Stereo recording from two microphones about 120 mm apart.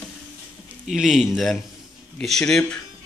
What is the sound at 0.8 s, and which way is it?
Speech, 5° right (ahead or behind).